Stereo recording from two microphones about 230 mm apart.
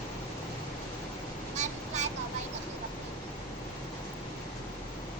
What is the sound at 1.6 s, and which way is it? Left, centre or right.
Vehicle, right.